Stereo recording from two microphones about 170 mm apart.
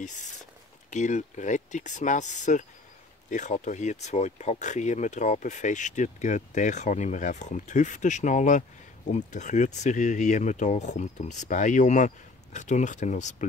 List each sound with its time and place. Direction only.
0.8 s speech: 45° left (ahead or behind)